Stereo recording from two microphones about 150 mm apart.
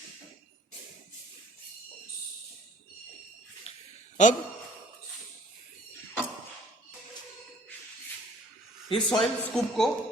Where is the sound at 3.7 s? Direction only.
45° left (ahead or behind).